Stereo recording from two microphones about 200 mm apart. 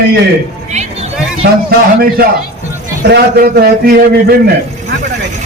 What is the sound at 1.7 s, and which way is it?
A man's voice, 50° right (ahead or behind).